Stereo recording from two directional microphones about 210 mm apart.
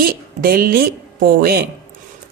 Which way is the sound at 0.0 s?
45° right (ahead or behind).